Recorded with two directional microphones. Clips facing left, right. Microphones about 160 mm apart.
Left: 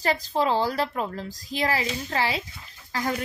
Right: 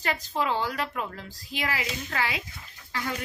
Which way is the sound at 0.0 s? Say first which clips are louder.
Left 5 dB; 35° left (ahead or behind).